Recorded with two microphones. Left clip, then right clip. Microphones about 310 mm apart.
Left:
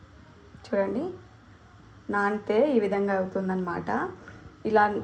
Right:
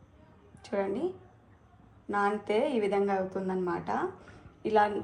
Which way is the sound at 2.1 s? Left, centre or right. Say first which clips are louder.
Left 2 dB; centre.